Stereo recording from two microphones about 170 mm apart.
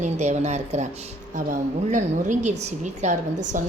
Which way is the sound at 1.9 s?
45° right (ahead or behind).